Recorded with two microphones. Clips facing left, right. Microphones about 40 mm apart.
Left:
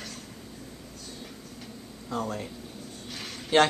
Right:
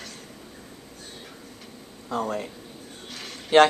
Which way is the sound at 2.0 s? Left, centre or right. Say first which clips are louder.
Right 4 dB; centre.